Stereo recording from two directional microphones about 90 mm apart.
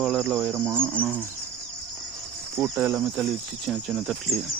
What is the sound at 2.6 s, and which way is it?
Speech, 20° right (ahead or behind).